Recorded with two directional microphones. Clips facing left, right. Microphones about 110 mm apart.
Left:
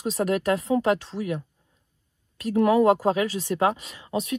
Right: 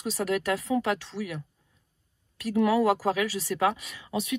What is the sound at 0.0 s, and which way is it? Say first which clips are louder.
Speech: left 4 dB; 30° left (ahead or behind).